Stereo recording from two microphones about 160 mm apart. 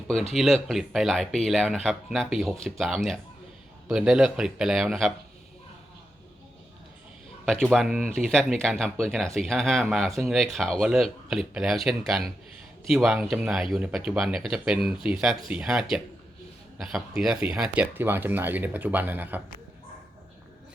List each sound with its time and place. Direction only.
0.1 s speech: centre (ahead or behind)
7.4 s speech: centre (ahead or behind)